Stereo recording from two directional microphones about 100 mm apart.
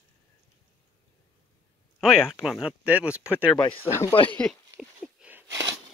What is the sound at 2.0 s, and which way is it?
Speech, 5° right (ahead or behind).